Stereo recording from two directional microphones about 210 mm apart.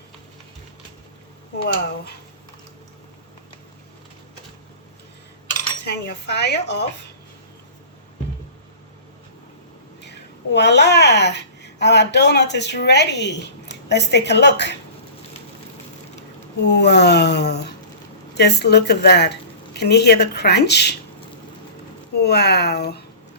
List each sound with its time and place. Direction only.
5.8 s a woman's voice: 50° left (ahead or behind)
10.5 s a child's voice: 55° left (ahead or behind)
16.6 s a woman's voice: 55° left (ahead or behind)
22.1 s speech: 50° left (ahead or behind)